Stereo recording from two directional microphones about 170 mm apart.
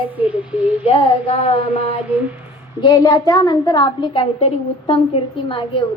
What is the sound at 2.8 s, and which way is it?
A woman's voice, 20° left (ahead or behind).